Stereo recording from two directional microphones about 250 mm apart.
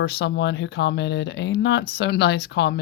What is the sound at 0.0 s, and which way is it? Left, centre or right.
Speech, left.